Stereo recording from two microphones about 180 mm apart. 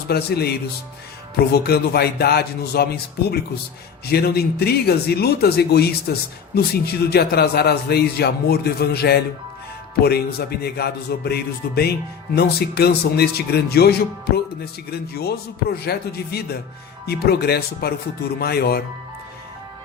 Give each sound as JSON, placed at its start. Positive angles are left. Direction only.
{"t": 0.1, "sound": "speech", "side_deg": 60}
{"t": 1.5, "sound": "speech", "side_deg": 60}